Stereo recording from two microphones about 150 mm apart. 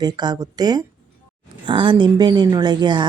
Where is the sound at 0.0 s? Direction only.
30° right (ahead or behind).